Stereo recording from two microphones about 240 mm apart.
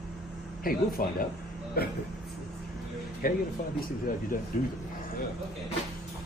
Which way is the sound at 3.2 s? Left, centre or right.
Left.